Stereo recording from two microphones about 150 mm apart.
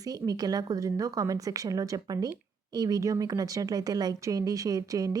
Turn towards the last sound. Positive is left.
turn(degrees=-25)  # may be behind; listen again after turning